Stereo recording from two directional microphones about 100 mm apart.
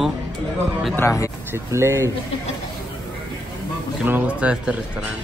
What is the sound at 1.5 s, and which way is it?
Speech, 30° right (ahead or behind).